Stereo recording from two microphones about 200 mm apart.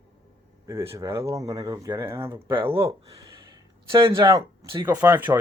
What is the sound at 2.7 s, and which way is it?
Speech, 25° right (ahead or behind).